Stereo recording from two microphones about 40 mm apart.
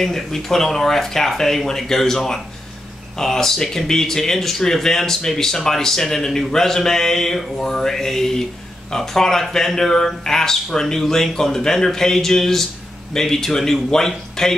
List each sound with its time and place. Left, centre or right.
0.0 s speech: centre